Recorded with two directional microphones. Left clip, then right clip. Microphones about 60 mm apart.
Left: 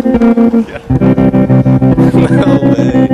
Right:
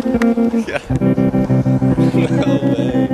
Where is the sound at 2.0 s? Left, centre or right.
Left.